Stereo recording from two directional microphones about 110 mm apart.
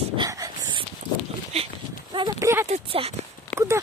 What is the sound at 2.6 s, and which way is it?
Speech, 70° right (ahead or behind).